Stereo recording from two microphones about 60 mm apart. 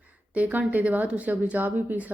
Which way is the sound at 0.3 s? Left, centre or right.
Right.